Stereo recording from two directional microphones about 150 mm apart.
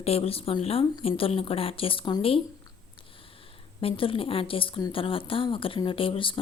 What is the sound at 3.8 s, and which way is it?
Speech, 40° left (ahead or behind).